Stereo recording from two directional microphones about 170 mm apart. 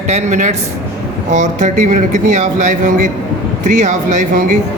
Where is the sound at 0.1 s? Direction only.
45° right (ahead or behind).